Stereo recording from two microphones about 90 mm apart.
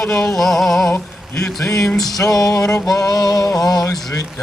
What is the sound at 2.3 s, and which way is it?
Music, 40° left (ahead or behind).